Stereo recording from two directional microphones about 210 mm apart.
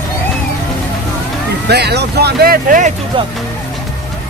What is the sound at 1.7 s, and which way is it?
Speech, 50° right (ahead or behind).